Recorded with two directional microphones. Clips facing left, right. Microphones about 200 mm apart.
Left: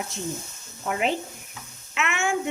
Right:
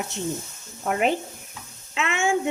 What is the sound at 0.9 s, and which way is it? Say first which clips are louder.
Speech: right 3 dB; 50° right (ahead or behind).